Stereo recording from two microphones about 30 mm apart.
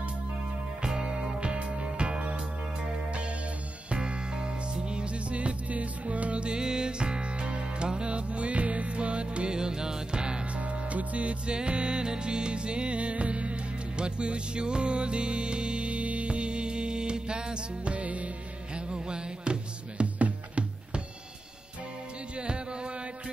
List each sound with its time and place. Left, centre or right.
0.8 s music: right
1.1 s music: right
6.6 s music: right
9.5 s music: right
10.4 s music: right
11.5 s music: right
17.8 s music: right
18.8 s music: right
20.2 s music: right
22.3 s a sound: right